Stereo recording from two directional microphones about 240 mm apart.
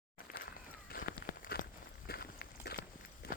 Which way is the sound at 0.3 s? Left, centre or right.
Left.